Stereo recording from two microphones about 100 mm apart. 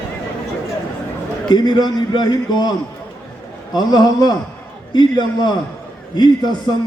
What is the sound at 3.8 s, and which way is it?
A man's voice, 45° left (ahead or behind).